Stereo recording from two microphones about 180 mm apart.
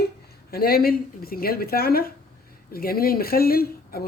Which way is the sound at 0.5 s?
55° left (ahead or behind).